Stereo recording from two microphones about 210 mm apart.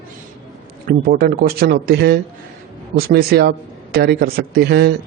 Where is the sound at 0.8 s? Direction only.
45° right (ahead or behind).